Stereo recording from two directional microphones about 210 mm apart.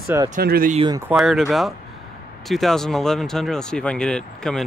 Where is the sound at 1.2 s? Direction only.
Centre (ahead or behind).